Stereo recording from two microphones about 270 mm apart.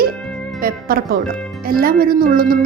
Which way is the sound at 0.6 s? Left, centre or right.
Right.